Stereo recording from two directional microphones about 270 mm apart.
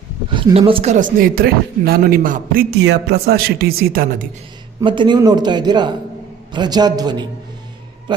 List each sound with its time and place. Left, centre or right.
0.3 s a man's voice: centre
4.8 s speech: centre